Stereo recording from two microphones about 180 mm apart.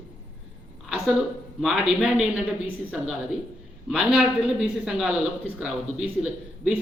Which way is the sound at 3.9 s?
5° right (ahead or behind).